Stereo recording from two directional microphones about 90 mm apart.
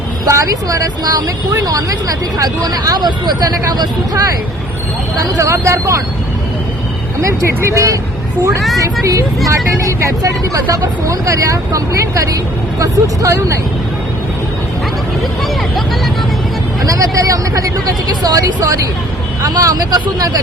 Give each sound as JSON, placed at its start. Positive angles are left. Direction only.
{"t": 0.3, "sound": "speech", "side_deg": -40}
{"t": 5.2, "sound": "speech", "side_deg": -35}
{"t": 7.2, "sound": "speech", "side_deg": -35}
{"t": 16.8, "sound": "speech", "side_deg": -40}